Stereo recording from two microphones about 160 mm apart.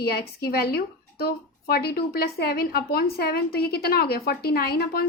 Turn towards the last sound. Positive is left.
turn(degrees=80)